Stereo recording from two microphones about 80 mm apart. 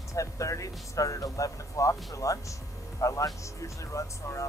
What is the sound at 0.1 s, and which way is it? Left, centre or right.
Speech, left.